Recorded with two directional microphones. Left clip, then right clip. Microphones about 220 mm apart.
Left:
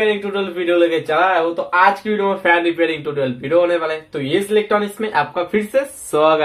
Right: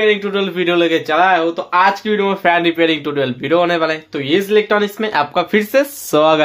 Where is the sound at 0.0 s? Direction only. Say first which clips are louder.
Right 3 dB; 45° right (ahead or behind).